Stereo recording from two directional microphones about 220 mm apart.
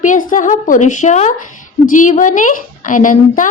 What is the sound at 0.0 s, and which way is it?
A woman's voice, 35° left (ahead or behind).